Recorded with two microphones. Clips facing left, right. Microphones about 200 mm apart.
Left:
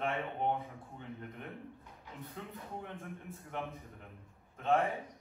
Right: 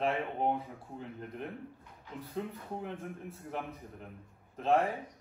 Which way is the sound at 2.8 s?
35° right (ahead or behind).